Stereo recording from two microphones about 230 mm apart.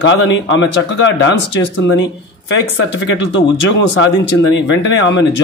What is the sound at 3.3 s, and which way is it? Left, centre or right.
A man's voice, left.